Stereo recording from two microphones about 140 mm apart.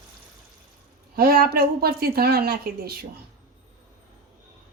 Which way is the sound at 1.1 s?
90° right.